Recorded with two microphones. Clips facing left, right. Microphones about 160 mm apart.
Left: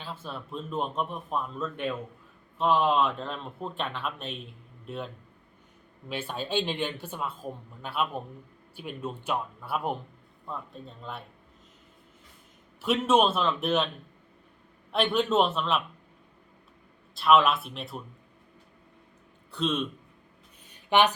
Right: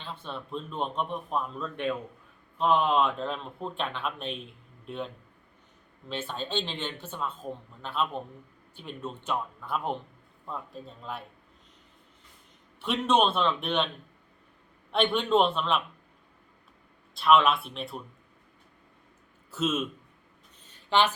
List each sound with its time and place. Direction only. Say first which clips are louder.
0.0 s a man's voice: even; 5° left (ahead or behind)
12.8 s speech: left 2 dB; 5° left (ahead or behind)
14.9 s speech: even; centre (ahead or behind)
17.2 s speech: even; centre (ahead or behind)
19.5 s speech: even; 5° right (ahead or behind)
20.7 s a sound: left 2 dB; 15° left (ahead or behind)